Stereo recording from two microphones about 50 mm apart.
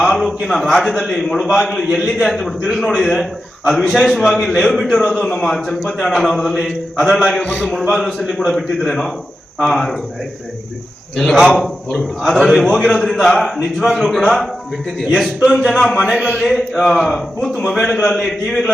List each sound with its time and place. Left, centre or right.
0.2 s a man's voice: centre
11.2 s a man's voice: centre
16.0 s a man's voice: centre
16.4 s a man's voice: centre